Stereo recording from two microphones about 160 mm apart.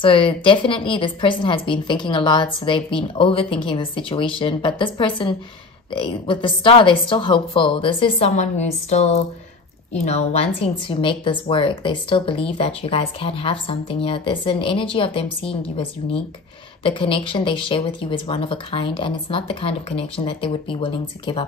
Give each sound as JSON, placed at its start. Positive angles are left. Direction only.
{"t": 0.0, "sound": "speech", "side_deg": 35}